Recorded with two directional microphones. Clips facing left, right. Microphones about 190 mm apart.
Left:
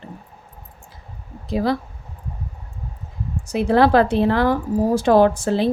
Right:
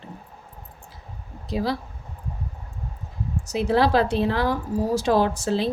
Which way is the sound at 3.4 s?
55° left (ahead or behind).